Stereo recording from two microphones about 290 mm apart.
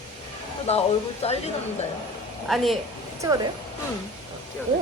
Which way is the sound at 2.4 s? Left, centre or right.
Centre.